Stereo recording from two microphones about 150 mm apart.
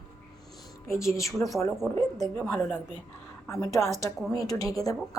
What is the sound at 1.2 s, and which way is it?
Speech, 20° left (ahead or behind).